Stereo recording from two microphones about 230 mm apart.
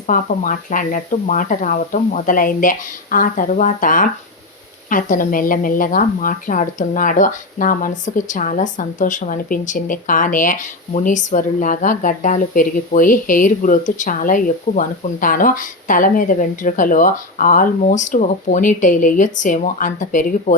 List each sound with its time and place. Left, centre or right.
0.1 s speech: left